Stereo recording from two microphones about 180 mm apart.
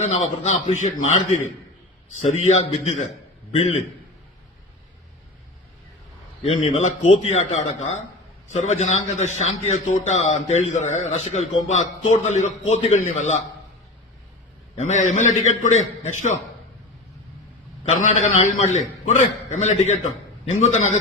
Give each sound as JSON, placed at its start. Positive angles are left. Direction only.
{"t": 0.4, "sound": "a man's voice", "side_deg": 40}
{"t": 2.4, "sound": "a man's voice", "side_deg": 40}
{"t": 6.4, "sound": "a man's voice", "side_deg": 35}
{"t": 14.8, "sound": "a man's voice", "side_deg": 40}
{"t": 18.0, "sound": "a man's voice", "side_deg": 40}